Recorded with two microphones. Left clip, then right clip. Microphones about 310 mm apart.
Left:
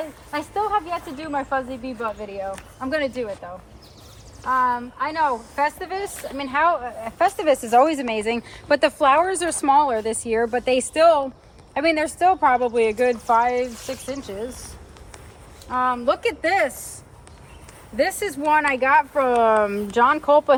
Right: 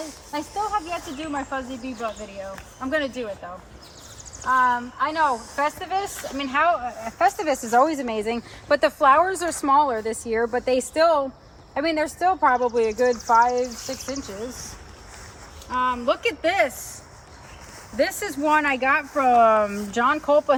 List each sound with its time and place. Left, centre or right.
0.5 s speech: left
4.4 s speech: centre
5.2 s speech: centre
5.6 s speech: left
7.4 s speech: left
15.7 s speech: left
17.9 s speech: centre
19.5 s speech: centre
20.0 s speech: left